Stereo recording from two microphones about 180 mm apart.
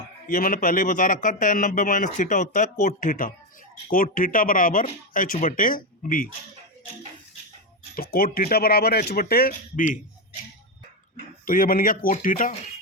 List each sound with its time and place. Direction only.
0.3 s a man's voice: 55° left (ahead or behind)
7.9 s speech: 55° left (ahead or behind)
11.4 s a man's voice: 50° left (ahead or behind)